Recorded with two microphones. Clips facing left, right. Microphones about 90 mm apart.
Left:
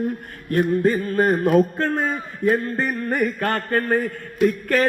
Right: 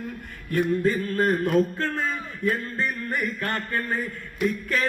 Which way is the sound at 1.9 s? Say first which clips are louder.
Left 5 dB; 50° left (ahead or behind).